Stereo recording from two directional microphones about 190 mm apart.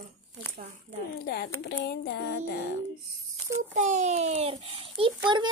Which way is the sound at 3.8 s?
40° right (ahead or behind).